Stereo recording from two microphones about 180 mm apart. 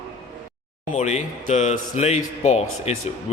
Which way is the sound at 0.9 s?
40° left (ahead or behind).